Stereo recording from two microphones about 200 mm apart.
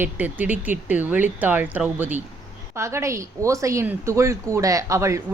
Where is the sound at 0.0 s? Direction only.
10° right (ahead or behind).